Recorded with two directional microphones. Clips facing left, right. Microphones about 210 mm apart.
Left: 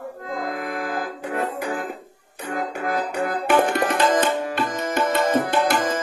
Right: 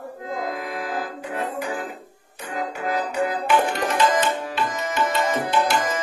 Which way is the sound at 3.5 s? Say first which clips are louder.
Left 5 dB; 55° left (ahead or behind).